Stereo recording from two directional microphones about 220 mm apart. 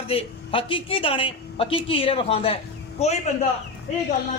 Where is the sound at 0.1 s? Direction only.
25° left (ahead or behind).